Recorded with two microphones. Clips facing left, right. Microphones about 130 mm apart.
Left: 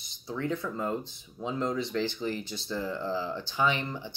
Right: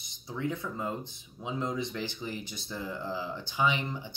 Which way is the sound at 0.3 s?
15° right (ahead or behind).